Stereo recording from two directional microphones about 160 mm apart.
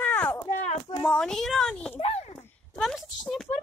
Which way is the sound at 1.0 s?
5° left (ahead or behind).